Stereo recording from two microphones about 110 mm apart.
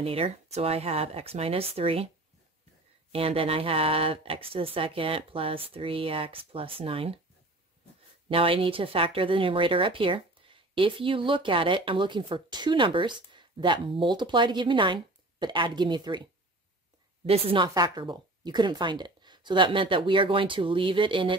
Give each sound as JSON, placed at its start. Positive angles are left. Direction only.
{"t": 0.0, "sound": "speech", "side_deg": -65}
{"t": 3.1, "sound": "speech", "side_deg": -60}
{"t": 8.3, "sound": "speech", "side_deg": -55}
{"t": 17.3, "sound": "speech", "side_deg": -60}
{"t": 17.7, "sound": "speech", "side_deg": -40}